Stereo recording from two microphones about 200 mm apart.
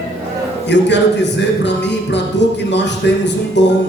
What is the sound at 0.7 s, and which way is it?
Speech, 60° left (ahead or behind).